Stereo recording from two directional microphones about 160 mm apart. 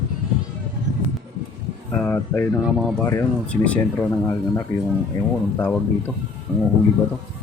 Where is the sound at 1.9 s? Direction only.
10° left (ahead or behind).